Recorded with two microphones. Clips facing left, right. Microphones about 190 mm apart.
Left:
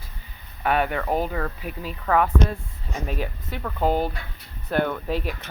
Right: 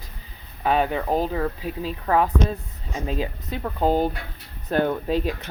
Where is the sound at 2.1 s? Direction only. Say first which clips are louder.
Even; 20° right (ahead or behind).